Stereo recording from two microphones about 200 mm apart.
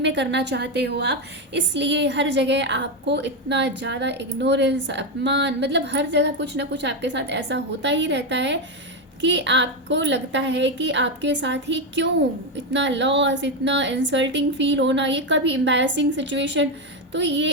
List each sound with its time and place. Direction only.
0.0 s a woman's voice: 60° right (ahead or behind)